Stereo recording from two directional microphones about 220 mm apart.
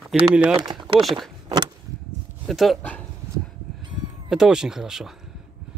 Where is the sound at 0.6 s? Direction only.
20° right (ahead or behind).